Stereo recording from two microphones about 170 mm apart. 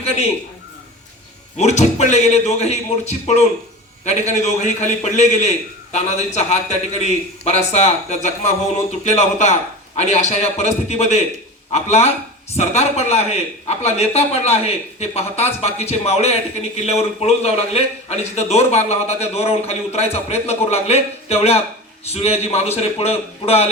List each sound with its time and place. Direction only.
1.5 s a man's voice: 40° left (ahead or behind)